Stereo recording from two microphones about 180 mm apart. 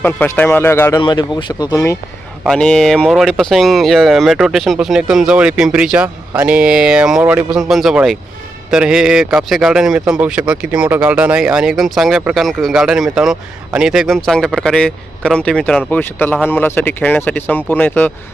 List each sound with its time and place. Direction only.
0.0 s speech: 10° left (ahead or behind)
1.0 s speech: 25° left (ahead or behind)
2.4 s speech: 5° left (ahead or behind)